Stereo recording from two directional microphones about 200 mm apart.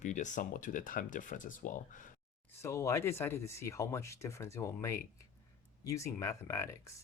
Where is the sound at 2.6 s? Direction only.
15° left (ahead or behind).